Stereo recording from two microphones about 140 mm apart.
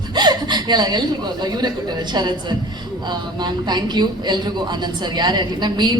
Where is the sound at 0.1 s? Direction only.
30° right (ahead or behind).